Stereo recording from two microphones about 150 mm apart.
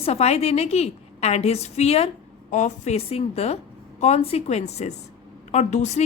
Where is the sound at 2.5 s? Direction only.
55° left (ahead or behind).